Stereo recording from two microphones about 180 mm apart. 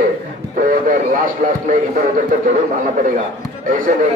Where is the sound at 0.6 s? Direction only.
45° right (ahead or behind).